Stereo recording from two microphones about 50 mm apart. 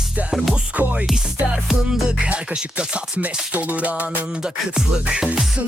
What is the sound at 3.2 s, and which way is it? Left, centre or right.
Music, right.